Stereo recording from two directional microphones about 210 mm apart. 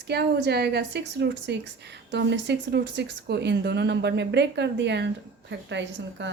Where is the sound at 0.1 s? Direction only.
50° right (ahead or behind).